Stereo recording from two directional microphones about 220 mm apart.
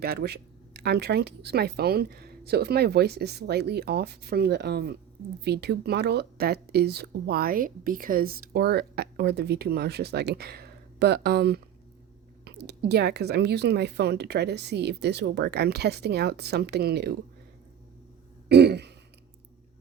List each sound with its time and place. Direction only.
0.0 s speech: 45° right (ahead or behind)
18.4 s throat clearing: 50° right (ahead or behind)